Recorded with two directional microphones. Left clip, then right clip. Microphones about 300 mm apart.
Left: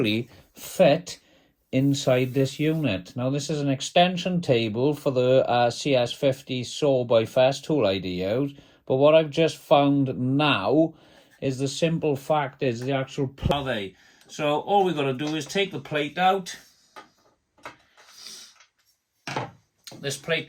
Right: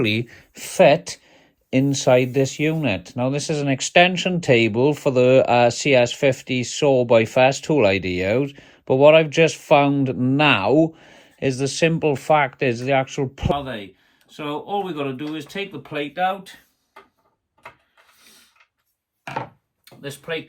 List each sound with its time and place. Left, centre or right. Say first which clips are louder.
0.0 s speech: right 4 dB; right
13.5 s speech: right 1 dB; centre
20.0 s speech: left 2 dB; centre